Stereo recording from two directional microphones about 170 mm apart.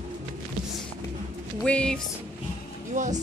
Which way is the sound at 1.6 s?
5° left (ahead or behind).